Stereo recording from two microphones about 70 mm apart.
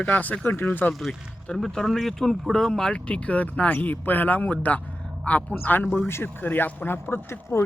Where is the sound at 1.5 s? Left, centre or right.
Centre; by 7.6 s left.